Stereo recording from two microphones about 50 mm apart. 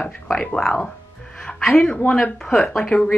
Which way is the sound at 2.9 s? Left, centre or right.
Left.